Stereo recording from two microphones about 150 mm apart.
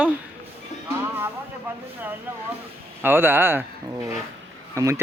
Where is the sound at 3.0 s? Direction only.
15° right (ahead or behind).